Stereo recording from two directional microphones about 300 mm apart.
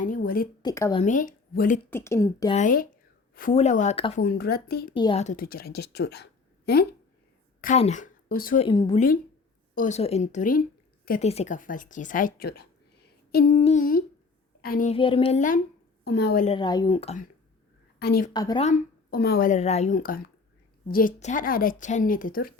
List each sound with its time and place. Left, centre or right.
0.0 s a sound: left
0.6 s speech: centre
1.0 s a woman's voice: left
1.9 s speech: centre
2.6 s speech: left
4.2 s speech: left
4.9 s speech: centre
8.6 s speech: centre
16.6 s speech: centre
18.0 s speech: left
18.3 s speech: centre